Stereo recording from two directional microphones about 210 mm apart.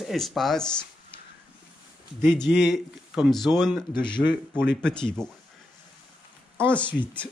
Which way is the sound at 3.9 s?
20° left (ahead or behind).